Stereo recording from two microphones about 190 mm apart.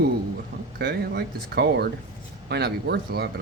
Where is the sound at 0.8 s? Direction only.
60° right (ahead or behind).